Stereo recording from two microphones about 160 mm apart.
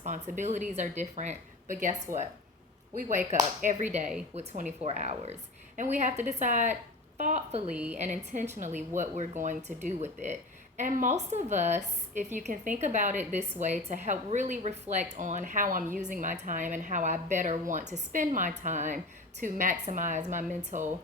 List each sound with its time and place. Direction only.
0.0 s a woman's voice: 50° right (ahead or behind)
7.7 s a woman's voice: 10° right (ahead or behind)
7.9 s a woman's voice: 45° right (ahead or behind)